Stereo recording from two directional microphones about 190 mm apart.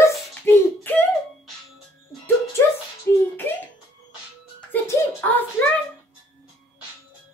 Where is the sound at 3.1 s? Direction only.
10° left (ahead or behind).